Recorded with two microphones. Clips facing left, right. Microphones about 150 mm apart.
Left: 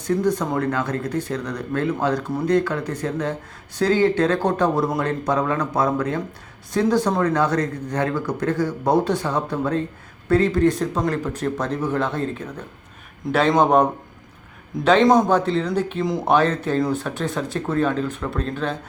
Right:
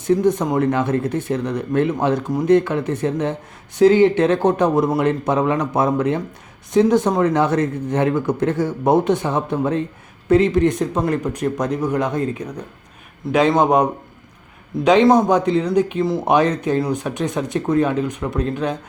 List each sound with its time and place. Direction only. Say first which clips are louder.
0.0 s speech: right 4 dB; 20° right (ahead or behind)
14.8 s speech: right 2 dB; 15° right (ahead or behind)